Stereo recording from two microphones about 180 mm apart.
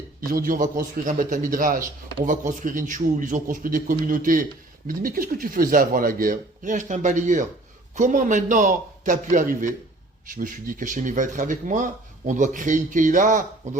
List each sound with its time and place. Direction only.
0.3 s speech: 50° right (ahead or behind)